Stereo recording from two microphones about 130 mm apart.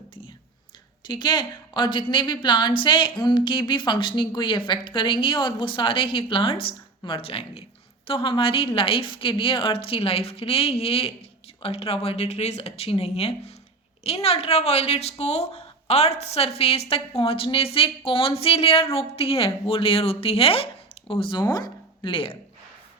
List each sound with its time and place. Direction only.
1.0 s a woman's voice: 35° left (ahead or behind)
21.4 s speech: 30° left (ahead or behind)